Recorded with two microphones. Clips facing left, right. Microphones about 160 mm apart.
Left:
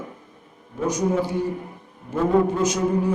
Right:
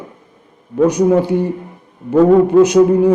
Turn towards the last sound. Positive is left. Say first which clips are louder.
# right 12 dB
turn(degrees=-65)  # may be behind; listen again after turning